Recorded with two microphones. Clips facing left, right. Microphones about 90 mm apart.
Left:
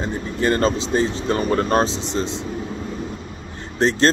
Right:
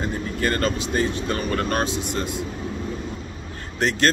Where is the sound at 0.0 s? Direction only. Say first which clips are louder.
Left 3 dB; 20° left (ahead or behind).